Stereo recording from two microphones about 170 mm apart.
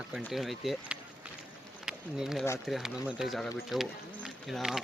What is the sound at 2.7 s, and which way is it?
Speech, centre (ahead or behind).